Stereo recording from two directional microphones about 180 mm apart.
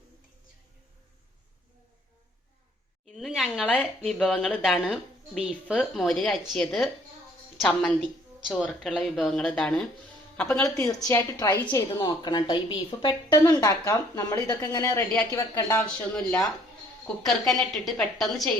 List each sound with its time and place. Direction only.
3.2 s a woman's voice: centre (ahead or behind)
10.8 s a woman's voice: 15° left (ahead or behind)
17.2 s a woman's voice: centre (ahead or behind)